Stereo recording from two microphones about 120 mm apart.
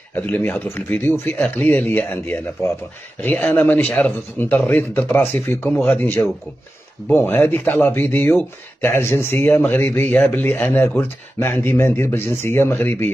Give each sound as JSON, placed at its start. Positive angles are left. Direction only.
{"t": 0.1, "sound": "speech", "side_deg": 15}